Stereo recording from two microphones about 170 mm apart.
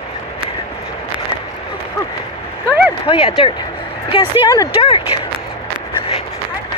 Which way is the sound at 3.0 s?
35° left (ahead or behind).